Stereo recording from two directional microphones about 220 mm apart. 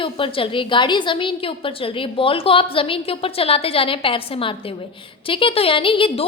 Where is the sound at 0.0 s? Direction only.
25° left (ahead or behind).